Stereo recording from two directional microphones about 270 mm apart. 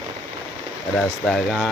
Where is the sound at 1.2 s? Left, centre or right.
Centre.